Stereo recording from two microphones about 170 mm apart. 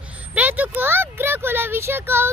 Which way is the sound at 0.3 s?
10° right (ahead or behind).